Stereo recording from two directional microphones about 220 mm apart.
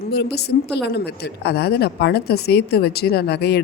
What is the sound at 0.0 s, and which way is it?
A woman's voice, 45° left (ahead or behind).